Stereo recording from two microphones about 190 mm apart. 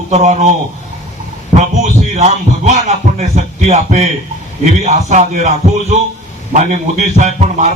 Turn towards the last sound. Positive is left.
turn(degrees=-40)  # may be behind; listen again after turning